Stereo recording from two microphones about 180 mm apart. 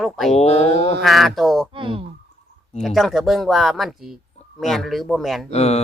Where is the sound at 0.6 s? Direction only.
65° right (ahead or behind).